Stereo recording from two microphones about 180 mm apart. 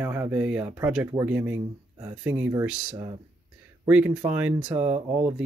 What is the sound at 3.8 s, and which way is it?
Speech, 10° right (ahead or behind).